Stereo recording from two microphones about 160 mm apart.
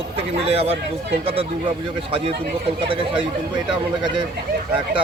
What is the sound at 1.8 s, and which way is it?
Speech, 35° right (ahead or behind).